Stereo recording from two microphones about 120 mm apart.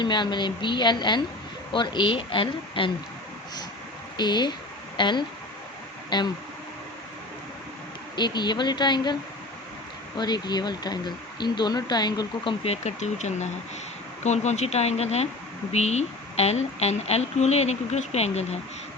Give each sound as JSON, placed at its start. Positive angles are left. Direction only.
{"t": 0.0, "sound": "speech", "side_deg": 40}
{"t": 4.2, "sound": "speech", "side_deg": 40}
{"t": 8.1, "sound": "speech", "side_deg": 40}
{"t": 10.2, "sound": "speech", "side_deg": 35}
{"t": 12.6, "sound": "speech", "side_deg": 65}